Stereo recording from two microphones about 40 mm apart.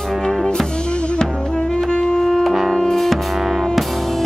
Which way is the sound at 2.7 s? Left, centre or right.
Centre.